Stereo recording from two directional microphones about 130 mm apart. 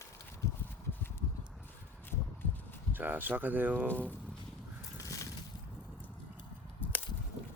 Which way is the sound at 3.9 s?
10° left (ahead or behind).